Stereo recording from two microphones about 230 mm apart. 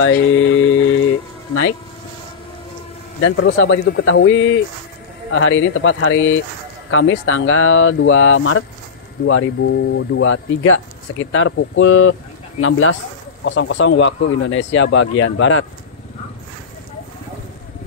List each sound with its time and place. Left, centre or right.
0.0 s music: left
1.5 s speech: left
3.2 s speech: left